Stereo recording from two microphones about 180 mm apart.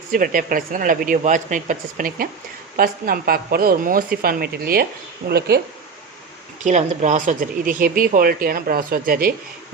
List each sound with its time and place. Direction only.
0.1 s speech: 50° right (ahead or behind)
6.6 s speech: 45° right (ahead or behind)